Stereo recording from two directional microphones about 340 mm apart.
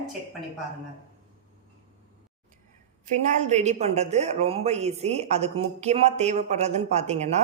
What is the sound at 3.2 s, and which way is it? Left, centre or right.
A woman's voice, centre.